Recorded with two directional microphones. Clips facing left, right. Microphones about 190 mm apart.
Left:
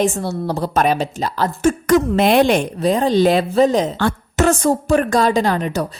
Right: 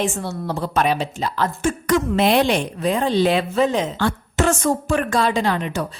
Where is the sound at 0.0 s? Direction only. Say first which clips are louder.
Left 5 dB; 40° left (ahead or behind).